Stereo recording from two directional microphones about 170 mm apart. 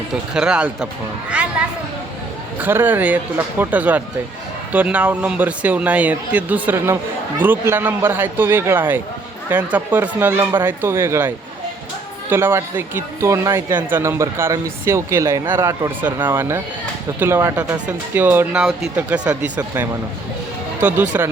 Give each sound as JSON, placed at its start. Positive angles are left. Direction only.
{"t": 0.1, "sound": "speech", "side_deg": -5}
{"t": 1.3, "sound": "a sound", "side_deg": -5}
{"t": 2.6, "sound": "speech", "side_deg": -10}